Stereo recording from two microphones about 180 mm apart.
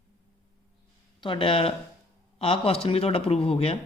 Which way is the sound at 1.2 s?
30° left (ahead or behind).